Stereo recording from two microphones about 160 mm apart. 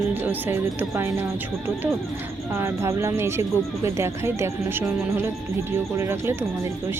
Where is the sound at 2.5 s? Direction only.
15° right (ahead or behind).